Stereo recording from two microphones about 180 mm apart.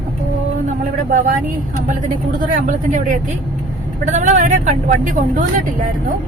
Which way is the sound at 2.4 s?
45° right (ahead or behind).